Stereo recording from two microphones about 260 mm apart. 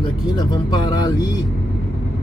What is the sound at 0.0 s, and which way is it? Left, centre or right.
Speech, centre.